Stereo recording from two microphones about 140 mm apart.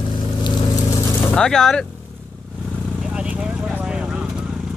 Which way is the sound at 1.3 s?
5° left (ahead or behind).